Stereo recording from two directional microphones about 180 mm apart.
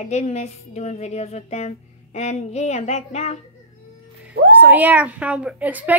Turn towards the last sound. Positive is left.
turn(degrees=-10)  # may be behind; listen again after turning